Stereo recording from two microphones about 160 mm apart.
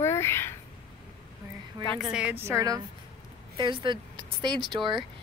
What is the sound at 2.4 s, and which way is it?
Speech, 20° right (ahead or behind).